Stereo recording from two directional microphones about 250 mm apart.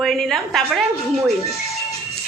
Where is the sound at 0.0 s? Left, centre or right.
Centre.